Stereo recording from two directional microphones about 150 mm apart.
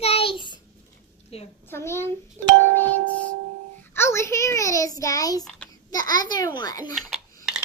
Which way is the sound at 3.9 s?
15° left (ahead or behind).